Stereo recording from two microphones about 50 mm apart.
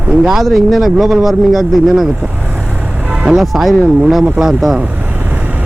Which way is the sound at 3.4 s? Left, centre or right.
Centre.